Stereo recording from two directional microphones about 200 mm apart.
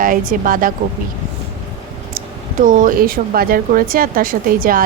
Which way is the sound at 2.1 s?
40° right (ahead or behind).